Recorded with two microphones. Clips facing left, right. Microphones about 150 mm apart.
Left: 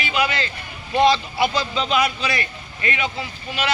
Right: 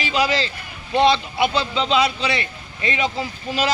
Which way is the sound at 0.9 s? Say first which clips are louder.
Even; 20° right (ahead or behind).